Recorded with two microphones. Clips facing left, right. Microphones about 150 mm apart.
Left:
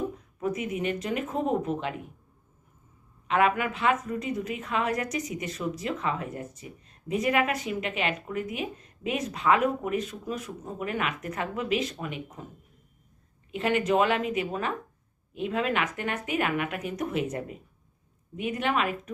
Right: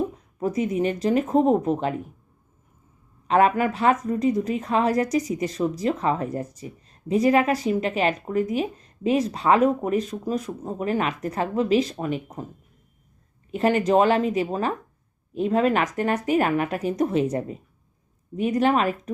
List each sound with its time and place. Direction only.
0.3 s a woman's voice: 35° right (ahead or behind)
3.2 s a woman's voice: 35° right (ahead or behind)
13.5 s a woman's voice: 40° right (ahead or behind)